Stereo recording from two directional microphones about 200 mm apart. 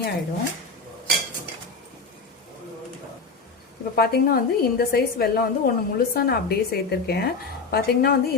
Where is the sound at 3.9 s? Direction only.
50° left (ahead or behind).